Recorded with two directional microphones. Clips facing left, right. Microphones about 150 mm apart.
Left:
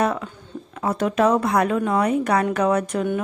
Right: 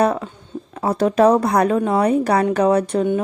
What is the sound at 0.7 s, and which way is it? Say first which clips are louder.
A woman's voice: right 4 dB; 35° right (ahead or behind).